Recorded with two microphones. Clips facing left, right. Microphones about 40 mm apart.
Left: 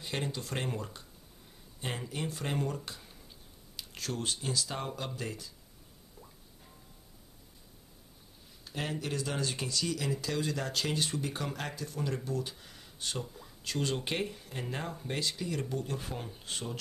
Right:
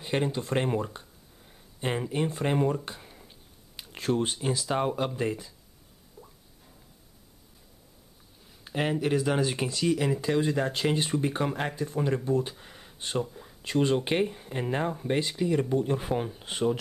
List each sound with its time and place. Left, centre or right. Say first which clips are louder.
0.0 s speech: right 8 dB; right
6.2 s drip: right 5 dB; centre
8.6 s a sound: right 8 dB; right
9.0 s speech: right 10 dB; right